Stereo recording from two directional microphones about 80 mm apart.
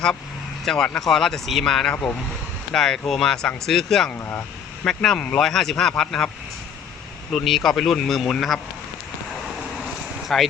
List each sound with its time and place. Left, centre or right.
0.6 s speech: centre
4.3 s a sound: left
4.9 s speech: centre
7.3 s speech: centre
10.3 s speech: centre